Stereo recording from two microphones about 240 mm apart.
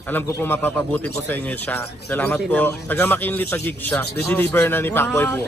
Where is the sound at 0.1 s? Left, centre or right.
Centre.